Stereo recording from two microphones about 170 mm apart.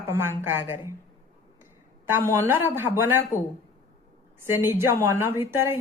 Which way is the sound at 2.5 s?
15° right (ahead or behind).